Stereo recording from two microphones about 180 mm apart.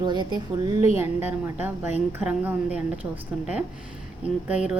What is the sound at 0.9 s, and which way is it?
A woman's voice, 10° right (ahead or behind).